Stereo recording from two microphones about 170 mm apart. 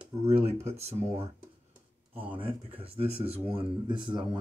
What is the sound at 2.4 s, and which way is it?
Speech, 30° right (ahead or behind).